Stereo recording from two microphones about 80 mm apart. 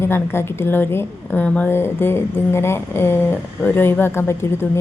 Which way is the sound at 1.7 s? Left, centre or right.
Left.